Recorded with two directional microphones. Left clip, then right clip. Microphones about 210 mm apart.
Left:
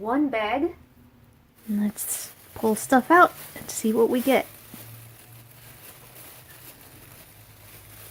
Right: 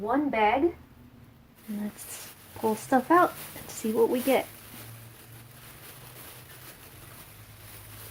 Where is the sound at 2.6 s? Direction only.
40° left (ahead or behind).